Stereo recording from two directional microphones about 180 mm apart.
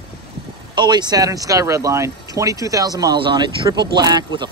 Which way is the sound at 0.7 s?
25° right (ahead or behind).